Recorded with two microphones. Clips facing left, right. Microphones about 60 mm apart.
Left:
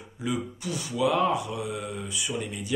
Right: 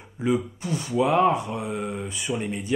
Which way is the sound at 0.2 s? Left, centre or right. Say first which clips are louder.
Right 6 dB; right.